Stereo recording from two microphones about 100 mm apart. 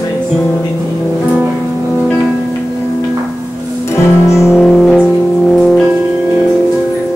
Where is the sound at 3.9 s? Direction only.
25° left (ahead or behind).